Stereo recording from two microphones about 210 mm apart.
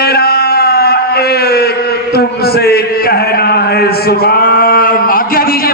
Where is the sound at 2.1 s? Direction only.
50° left (ahead or behind).